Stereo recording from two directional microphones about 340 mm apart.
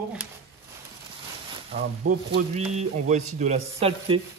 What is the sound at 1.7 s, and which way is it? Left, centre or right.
Speech, centre.